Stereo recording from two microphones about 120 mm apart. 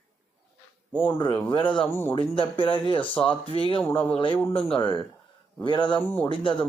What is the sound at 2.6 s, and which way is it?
Speech, 45° left (ahead or behind).